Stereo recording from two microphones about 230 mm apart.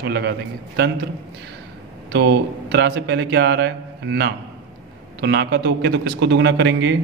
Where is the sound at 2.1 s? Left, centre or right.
Right.